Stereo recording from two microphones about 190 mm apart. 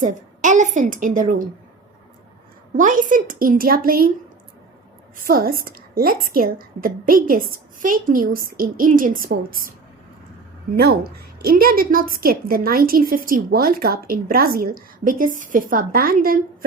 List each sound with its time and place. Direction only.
0.0 s a woman's voice: 40° right (ahead or behind)
2.7 s a woman's voice: 45° right (ahead or behind)
5.2 s a woman's voice: 50° right (ahead or behind)
10.8 s a woman's voice: 55° right (ahead or behind)